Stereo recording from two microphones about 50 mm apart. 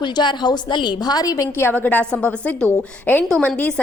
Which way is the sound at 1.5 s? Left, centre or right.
Left.